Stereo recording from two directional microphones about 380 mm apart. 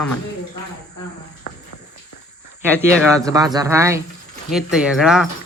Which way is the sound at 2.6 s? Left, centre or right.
Centre.